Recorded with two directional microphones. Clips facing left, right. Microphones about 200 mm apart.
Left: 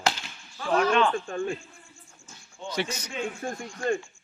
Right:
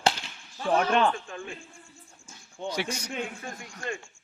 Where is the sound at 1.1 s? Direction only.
45° left (ahead or behind).